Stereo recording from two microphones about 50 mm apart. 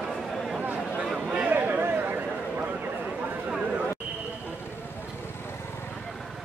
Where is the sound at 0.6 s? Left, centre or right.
Right.